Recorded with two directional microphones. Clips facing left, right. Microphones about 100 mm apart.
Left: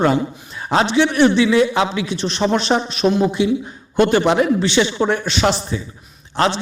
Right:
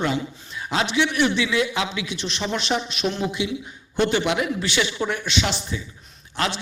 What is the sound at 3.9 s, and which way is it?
A man's voice, 50° left (ahead or behind).